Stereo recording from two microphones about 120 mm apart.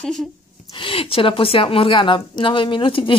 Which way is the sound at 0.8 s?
50° left (ahead or behind).